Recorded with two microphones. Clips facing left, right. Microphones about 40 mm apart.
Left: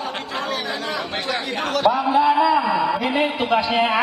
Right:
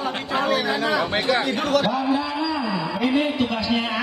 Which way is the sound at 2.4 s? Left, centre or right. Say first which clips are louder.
Left 7 dB; left.